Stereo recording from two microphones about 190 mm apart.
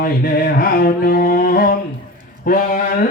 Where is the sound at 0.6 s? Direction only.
50° left (ahead or behind).